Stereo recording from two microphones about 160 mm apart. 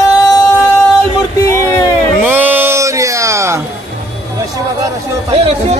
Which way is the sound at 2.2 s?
10° right (ahead or behind).